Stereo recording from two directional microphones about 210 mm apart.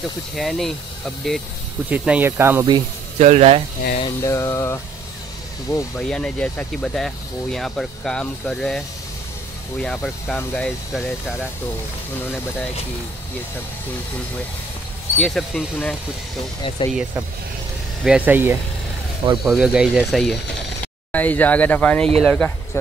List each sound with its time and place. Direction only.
0.4 s speech: centre (ahead or behind)
3.2 s speech: 35° right (ahead or behind)
4.0 s speech: 15° left (ahead or behind)
5.9 s speech: 5° left (ahead or behind)
15.1 s speech: centre (ahead or behind)
16.6 s speech: 25° left (ahead or behind)
18.0 s speech: 5° right (ahead or behind)